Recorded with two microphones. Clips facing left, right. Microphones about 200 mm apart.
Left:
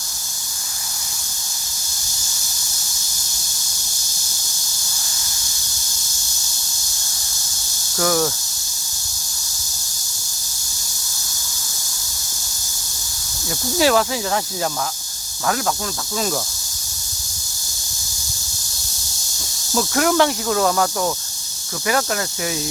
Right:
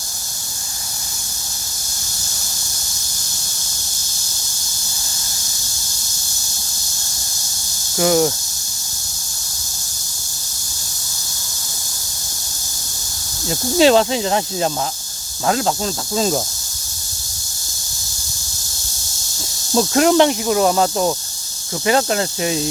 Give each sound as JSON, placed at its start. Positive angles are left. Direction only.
{"t": 7.9, "sound": "speech", "side_deg": -20}
{"t": 13.7, "sound": "speech", "side_deg": -25}
{"t": 19.7, "sound": "speech", "side_deg": -25}